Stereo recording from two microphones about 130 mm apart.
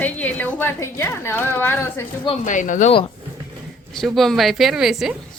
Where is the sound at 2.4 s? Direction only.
75° left (ahead or behind).